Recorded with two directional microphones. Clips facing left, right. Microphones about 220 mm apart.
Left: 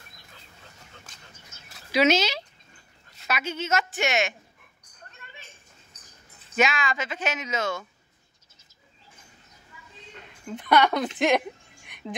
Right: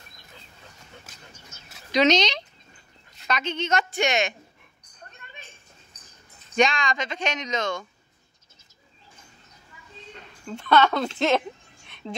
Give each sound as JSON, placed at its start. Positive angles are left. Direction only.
{"t": 1.9, "sound": "speech", "side_deg": 5}
{"t": 6.5, "sound": "speech", "side_deg": 5}
{"t": 10.4, "sound": "speech", "side_deg": 15}